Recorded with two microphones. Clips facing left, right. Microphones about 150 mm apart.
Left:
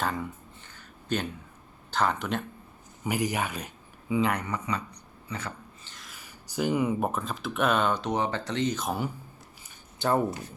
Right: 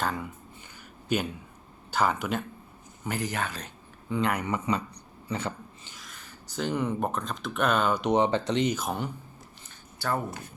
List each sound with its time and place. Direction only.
0.0 s speech: centre (ahead or behind)
3.0 s speech: 10° left (ahead or behind)
4.1 s speech: centre (ahead or behind)
4.4 s speech: 25° right (ahead or behind)
5.3 s a sound: 25° right (ahead or behind)
5.9 s speech: centre (ahead or behind)
8.0 s speech: 20° right (ahead or behind)
8.8 s speech: 5° left (ahead or behind)
10.0 s speech: 20° left (ahead or behind)